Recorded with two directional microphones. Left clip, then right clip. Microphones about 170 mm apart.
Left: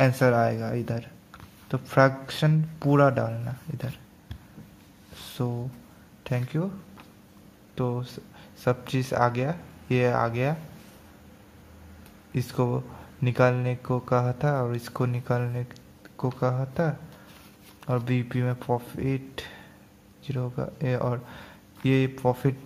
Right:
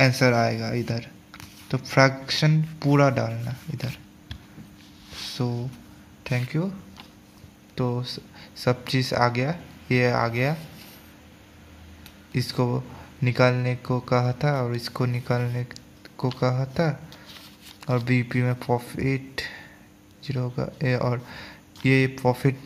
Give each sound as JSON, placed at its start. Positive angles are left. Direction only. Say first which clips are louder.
{"t": 0.0, "sound": "speech", "louder": "right 1 dB", "side_deg": 0}
{"t": 5.4, "sound": "speech", "louder": "left 2 dB", "side_deg": -5}
{"t": 7.7, "sound": "speech", "louder": "right 2 dB", "side_deg": -5}
{"t": 12.4, "sound": "speech", "louder": "right 2 dB", "side_deg": -5}